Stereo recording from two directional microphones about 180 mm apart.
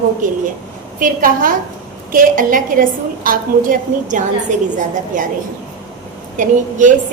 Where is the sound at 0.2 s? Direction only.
45° right (ahead or behind).